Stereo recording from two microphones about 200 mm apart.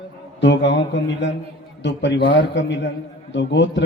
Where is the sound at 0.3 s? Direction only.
60° left (ahead or behind).